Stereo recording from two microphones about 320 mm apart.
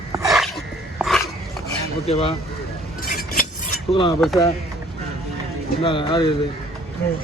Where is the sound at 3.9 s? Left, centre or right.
Centre.